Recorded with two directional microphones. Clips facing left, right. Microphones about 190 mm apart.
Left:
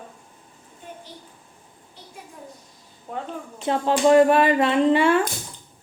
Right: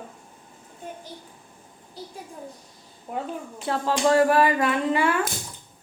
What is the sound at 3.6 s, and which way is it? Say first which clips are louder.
A woman's voice: left 4 dB; 20° left (ahead or behind).